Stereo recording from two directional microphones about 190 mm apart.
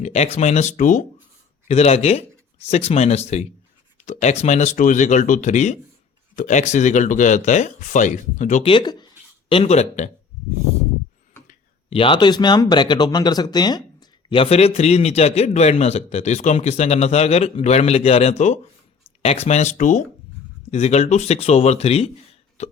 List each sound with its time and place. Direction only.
0.0 s speech: 35° left (ahead or behind)
8.7 s speech: 25° left (ahead or behind)
9.5 s speech: 35° left (ahead or behind)
11.9 s speech: 30° left (ahead or behind)
22.6 s plop: 40° left (ahead or behind)